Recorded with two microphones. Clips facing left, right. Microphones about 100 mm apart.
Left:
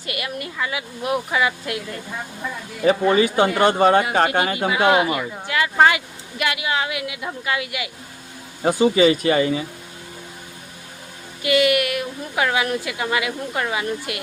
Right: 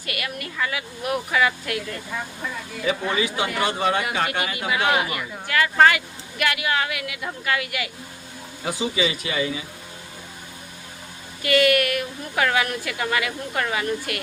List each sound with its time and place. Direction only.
0.0 s speech: 25° left (ahead or behind)
2.8 s speech: 45° left (ahead or behind)
4.3 s speech: 35° left (ahead or behind)
4.7 s speech: 20° left (ahead or behind)
8.6 s speech: 45° left (ahead or behind)
11.4 s speech: 15° left (ahead or behind)